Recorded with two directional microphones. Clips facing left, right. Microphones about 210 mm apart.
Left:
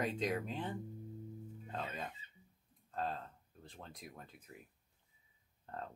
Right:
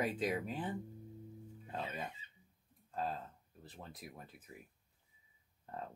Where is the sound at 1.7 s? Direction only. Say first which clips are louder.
Right 1 dB; 10° right (ahead or behind).